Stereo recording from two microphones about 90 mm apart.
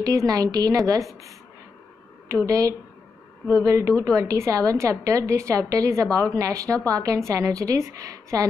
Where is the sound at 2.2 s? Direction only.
35° right (ahead or behind).